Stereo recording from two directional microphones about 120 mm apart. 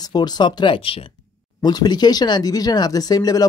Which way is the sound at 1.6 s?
35° left (ahead or behind).